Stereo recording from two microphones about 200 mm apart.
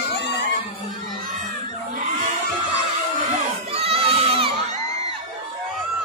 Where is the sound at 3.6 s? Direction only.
30° right (ahead or behind).